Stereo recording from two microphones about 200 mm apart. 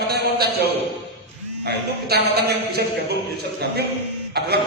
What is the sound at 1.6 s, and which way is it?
A man's voice, 55° right (ahead or behind).